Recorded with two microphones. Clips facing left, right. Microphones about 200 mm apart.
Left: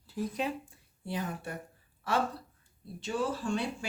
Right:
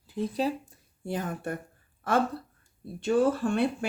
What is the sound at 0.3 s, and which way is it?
Speech, 40° right (ahead or behind).